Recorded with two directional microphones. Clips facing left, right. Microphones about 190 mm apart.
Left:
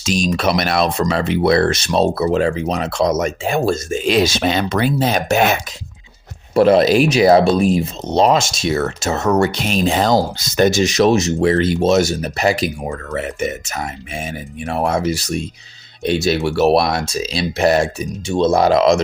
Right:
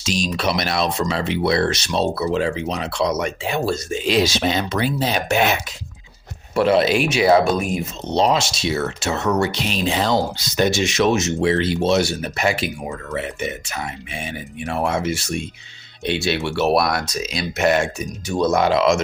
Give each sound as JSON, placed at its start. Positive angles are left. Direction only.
{"t": 0.0, "sound": "speech", "side_deg": 50}
{"t": 8.1, "sound": "speech", "side_deg": 50}
{"t": 18.6, "sound": "speech", "side_deg": 40}